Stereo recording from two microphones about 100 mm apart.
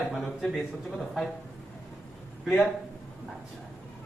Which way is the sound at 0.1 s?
Centre (ahead or behind).